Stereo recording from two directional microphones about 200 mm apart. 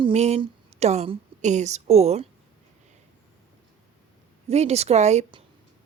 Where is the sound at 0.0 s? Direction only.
30° right (ahead or behind).